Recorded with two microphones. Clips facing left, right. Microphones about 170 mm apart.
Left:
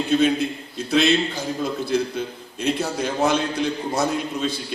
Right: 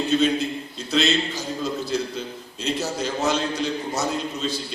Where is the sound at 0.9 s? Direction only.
55° left (ahead or behind).